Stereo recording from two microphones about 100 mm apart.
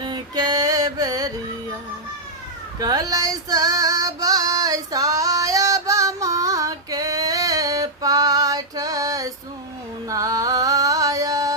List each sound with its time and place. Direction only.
0.0 s music: 45° right (ahead or behind)
2.8 s female singing: 40° right (ahead or behind)
10.1 s music: 35° right (ahead or behind)